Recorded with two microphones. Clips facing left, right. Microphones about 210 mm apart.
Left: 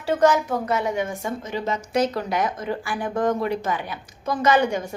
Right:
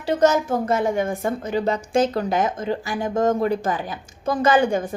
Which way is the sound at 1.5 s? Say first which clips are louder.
Right 5 dB; 35° right (ahead or behind).